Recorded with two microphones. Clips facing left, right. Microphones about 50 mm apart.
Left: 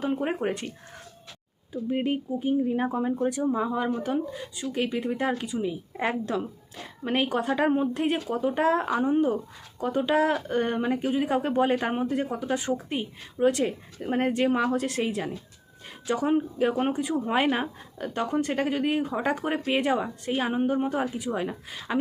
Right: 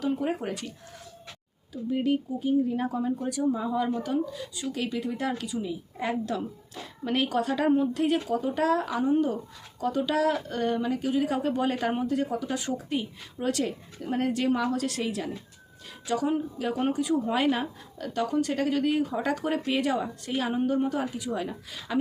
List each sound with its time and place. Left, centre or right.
0.0 s speech: left
1.7 s speech: left